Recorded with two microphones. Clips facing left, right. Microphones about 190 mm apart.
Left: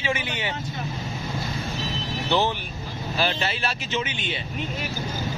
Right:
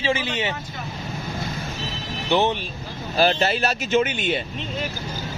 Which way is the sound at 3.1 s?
40° right (ahead or behind).